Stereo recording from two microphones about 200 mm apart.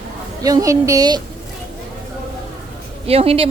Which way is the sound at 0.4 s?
15° right (ahead or behind).